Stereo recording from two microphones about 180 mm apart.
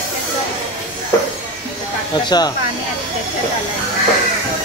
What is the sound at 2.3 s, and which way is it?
Speech, 25° left (ahead or behind).